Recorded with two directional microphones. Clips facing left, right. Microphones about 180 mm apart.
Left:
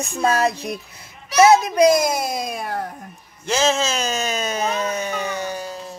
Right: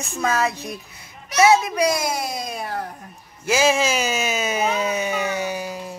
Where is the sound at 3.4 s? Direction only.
10° right (ahead or behind).